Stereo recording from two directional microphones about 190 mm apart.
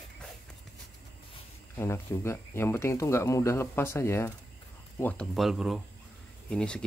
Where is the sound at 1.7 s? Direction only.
15° left (ahead or behind).